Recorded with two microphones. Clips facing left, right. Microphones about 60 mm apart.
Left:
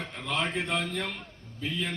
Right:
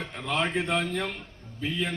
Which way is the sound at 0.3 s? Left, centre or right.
Right.